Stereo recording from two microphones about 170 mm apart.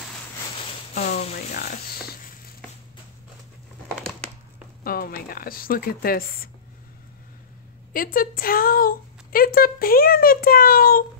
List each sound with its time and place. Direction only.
0.9 s speech: 60° left (ahead or behind)
4.8 s a woman's voice: 60° left (ahead or behind)
7.9 s a woman's voice: 55° left (ahead or behind)